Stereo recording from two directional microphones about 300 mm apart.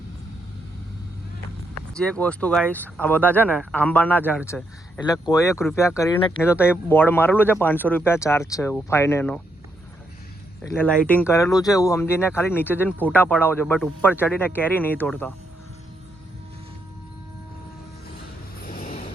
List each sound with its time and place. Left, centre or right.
1.9 s speech: centre
10.6 s speech: centre
18.6 s vehicle: left